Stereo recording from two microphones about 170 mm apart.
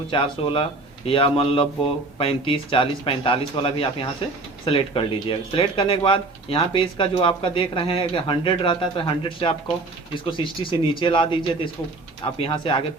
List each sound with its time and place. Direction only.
0.1 s speech: 30° left (ahead or behind)